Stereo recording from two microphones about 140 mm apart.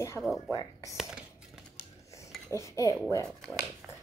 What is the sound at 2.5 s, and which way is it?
Speech, 20° left (ahead or behind).